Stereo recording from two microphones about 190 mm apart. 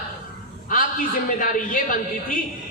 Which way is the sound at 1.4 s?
45° left (ahead or behind).